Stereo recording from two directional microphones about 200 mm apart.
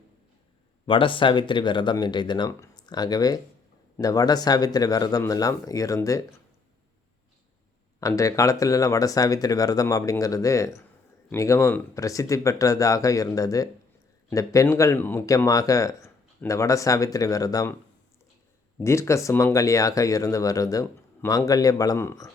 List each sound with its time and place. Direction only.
0.9 s speech: 25° left (ahead or behind)
7.9 s speech: 15° left (ahead or behind)
18.8 s speech: 15° left (ahead or behind)